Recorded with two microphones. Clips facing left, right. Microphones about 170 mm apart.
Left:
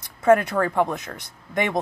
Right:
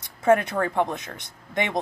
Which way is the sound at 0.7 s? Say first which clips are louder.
Left 2 dB; 50° left (ahead or behind).